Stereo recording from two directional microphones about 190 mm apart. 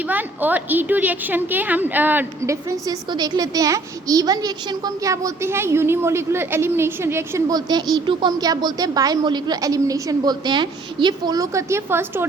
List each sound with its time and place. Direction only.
0.1 s a woman's voice: 10° right (ahead or behind)